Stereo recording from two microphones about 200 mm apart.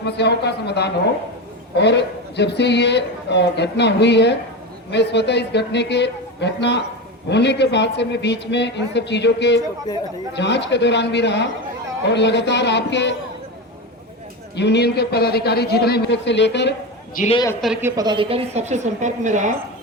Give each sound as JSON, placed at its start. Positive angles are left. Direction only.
{"t": 0.0, "sound": "speech", "side_deg": 55}
{"t": 14.5, "sound": "a man's voice", "side_deg": 60}
{"t": 17.3, "sound": "a man's voice", "side_deg": 15}
{"t": 17.6, "sound": "a woman's voice", "side_deg": -5}